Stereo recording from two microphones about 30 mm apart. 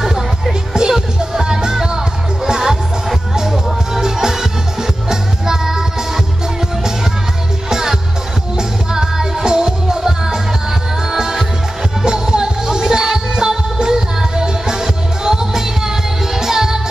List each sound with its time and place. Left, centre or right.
0.0 s music: centre
7.7 s music: centre
12.0 s music: right